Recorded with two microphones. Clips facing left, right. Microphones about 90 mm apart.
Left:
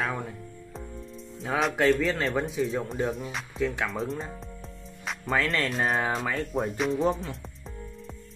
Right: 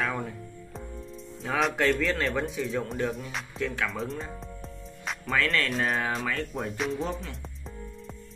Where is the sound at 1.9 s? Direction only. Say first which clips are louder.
Left 2 dB; centre (ahead or behind).